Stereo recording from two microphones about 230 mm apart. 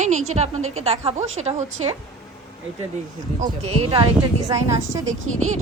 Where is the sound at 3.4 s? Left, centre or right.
Right.